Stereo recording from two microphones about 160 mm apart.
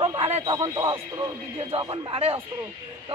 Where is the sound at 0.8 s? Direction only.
35° right (ahead or behind).